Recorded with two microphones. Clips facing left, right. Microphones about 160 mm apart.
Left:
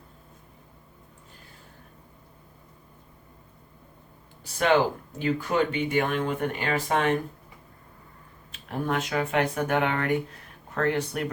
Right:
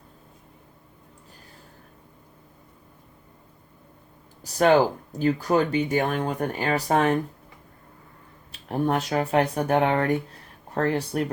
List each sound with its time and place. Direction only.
4.5 s speech: 40° right (ahead or behind)
8.5 s speech: 35° right (ahead or behind)